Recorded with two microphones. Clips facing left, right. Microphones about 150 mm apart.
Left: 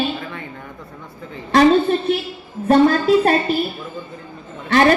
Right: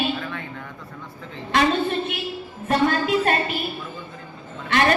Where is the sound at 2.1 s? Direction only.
35° left (ahead or behind).